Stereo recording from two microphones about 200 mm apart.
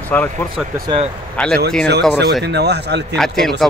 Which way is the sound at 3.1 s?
Centre (ahead or behind).